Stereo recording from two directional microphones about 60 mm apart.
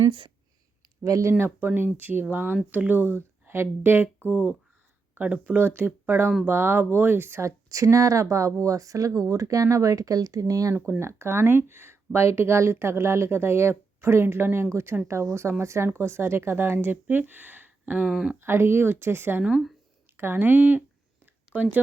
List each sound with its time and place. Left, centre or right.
1.0 s speech: right
1.5 s speech: right
3.4 s speech: right
4.3 s speech: right
7.4 s speech: right
11.0 s speech: right
18.1 s speech: centre
18.3 s speech: right
19.4 s speech: centre
20.1 s speech: right